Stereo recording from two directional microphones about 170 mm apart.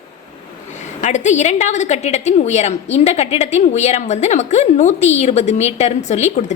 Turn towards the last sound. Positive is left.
turn(degrees=40)  # may be behind; listen again after turning